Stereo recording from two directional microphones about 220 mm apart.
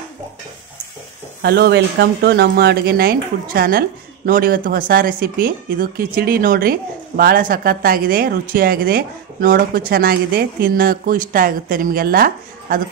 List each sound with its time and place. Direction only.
1.4 s speech: 50° right (ahead or behind)